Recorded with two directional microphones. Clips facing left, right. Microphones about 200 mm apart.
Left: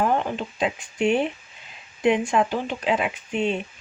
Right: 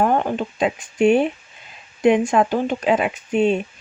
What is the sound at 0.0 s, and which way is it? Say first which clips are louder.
Speech: right 4 dB; 50° right (ahead or behind).